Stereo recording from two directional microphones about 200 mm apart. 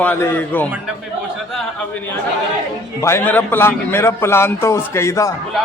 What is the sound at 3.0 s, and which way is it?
A man's voice, 15° left (ahead or behind).